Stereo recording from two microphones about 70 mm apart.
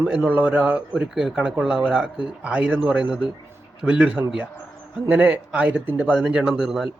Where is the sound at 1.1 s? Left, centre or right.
Centre; by 6.1 s right.